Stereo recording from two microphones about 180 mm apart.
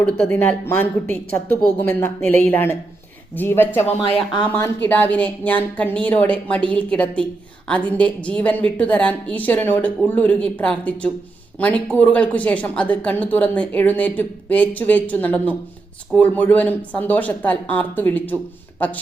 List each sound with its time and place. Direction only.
0.0 s speech: 10° left (ahead or behind)